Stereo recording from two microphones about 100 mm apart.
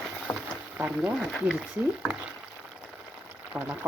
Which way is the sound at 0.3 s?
15° left (ahead or behind).